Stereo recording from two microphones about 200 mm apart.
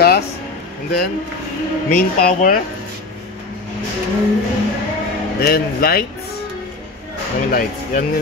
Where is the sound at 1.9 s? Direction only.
45° left (ahead or behind).